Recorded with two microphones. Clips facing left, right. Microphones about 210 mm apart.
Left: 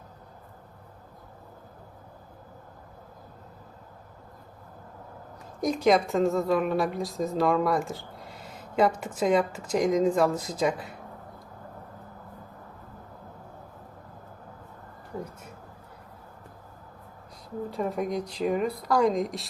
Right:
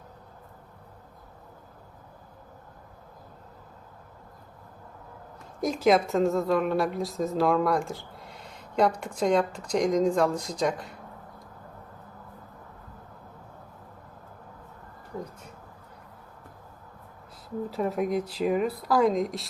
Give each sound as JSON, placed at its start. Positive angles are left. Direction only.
{"t": 5.5, "sound": "a woman's voice", "side_deg": 0}
{"t": 17.7, "sound": "speech", "side_deg": 0}